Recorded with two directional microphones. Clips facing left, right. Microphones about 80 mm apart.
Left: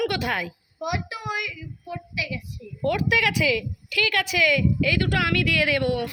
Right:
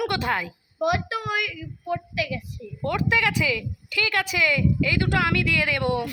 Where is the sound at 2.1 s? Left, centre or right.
Right.